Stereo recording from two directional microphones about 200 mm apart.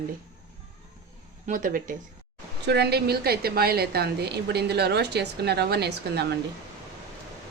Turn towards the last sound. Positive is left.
turn(degrees=-55)  # may be behind; listen again after turning